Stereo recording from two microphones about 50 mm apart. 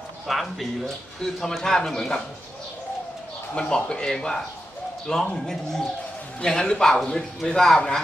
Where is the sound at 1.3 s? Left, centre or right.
Centre.